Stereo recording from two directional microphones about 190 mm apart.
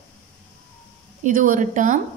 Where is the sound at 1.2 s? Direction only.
45° right (ahead or behind).